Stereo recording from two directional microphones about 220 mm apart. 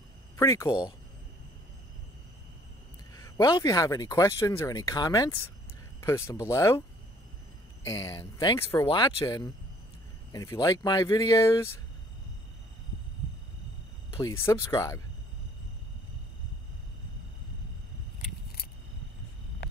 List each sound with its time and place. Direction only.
0.4 s speech: 15° left (ahead or behind)
3.2 s speech: 15° left (ahead or behind)
7.8 s speech: 15° left (ahead or behind)
14.4 s speech: 15° left (ahead or behind)